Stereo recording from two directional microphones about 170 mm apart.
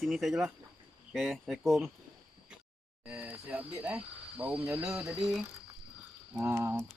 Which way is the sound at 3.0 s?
10° right (ahead or behind).